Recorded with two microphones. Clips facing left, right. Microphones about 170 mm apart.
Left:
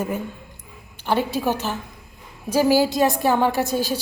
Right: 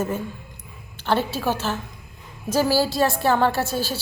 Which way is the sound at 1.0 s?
15° left (ahead or behind).